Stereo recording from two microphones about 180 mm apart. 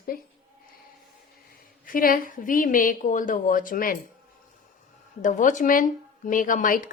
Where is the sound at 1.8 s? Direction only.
50° left (ahead or behind).